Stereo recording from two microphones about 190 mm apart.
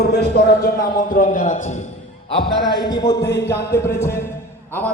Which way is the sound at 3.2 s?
60° left (ahead or behind).